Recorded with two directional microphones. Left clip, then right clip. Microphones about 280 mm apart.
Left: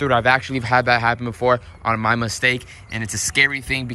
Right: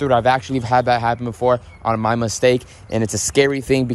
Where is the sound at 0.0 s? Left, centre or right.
Centre.